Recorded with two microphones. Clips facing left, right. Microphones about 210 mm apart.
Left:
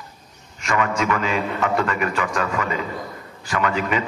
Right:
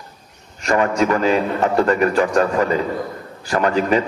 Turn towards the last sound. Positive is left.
turn(degrees=-35)  # may be behind; listen again after turning